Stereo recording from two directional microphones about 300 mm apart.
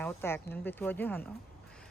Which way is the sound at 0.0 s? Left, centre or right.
Centre.